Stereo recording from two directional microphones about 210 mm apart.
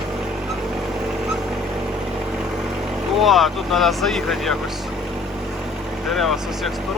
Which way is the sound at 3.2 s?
Centre (ahead or behind).